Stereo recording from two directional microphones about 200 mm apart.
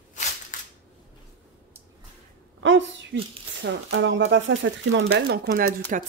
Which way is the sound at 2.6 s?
65° right (ahead or behind).